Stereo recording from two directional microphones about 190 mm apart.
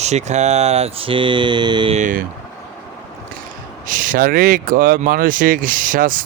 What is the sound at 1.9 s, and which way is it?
Speech, 40° right (ahead or behind).